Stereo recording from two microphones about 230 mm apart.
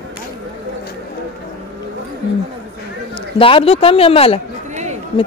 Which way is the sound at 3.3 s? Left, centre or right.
Left.